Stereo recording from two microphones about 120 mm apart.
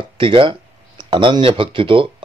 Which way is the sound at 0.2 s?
45° right (ahead or behind).